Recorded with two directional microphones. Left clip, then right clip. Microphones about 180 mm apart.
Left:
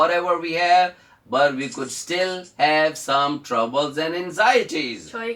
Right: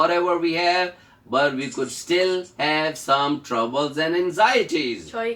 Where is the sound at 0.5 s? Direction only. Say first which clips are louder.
Left 8 dB; 10° left (ahead or behind).